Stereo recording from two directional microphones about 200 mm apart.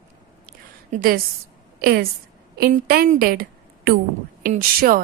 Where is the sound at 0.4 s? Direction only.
40° right (ahead or behind).